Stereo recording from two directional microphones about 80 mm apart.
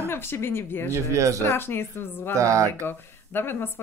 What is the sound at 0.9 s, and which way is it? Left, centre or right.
Speech, right.